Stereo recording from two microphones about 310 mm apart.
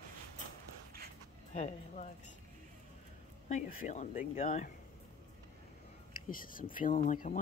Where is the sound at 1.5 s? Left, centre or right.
Left.